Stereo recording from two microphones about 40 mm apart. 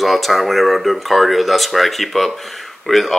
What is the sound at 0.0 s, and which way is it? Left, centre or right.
Speech, centre.